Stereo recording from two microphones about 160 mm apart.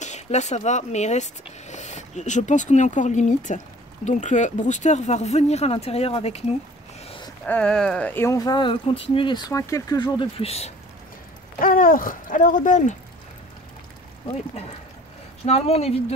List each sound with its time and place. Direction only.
0.0 s speech: 45° left (ahead or behind)
7.1 s a sound: 30° left (ahead or behind)
7.4 s speech: 5° left (ahead or behind); by 9.5 s 30° left (ahead or behind)
9.5 s speech: 20° left (ahead or behind); by 10.7 s 40° left (ahead or behind)
11.6 s speech: 60° left (ahead or behind)
15.4 s speech: 40° left (ahead or behind)